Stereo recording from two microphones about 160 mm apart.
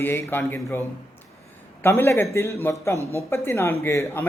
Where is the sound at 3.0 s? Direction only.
20° right (ahead or behind).